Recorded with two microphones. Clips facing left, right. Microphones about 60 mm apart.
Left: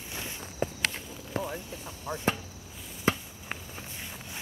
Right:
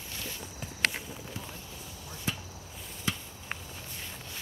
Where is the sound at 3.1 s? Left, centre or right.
Left.